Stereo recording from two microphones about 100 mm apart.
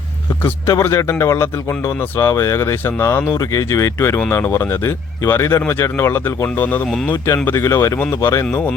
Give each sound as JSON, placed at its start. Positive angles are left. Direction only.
{"t": 0.4, "sound": "speech", "side_deg": 25}